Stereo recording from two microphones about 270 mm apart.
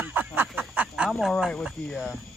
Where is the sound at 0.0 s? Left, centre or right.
Centre.